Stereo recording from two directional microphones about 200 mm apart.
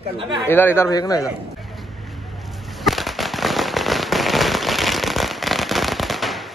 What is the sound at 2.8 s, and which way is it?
Firecracker, centre (ahead or behind).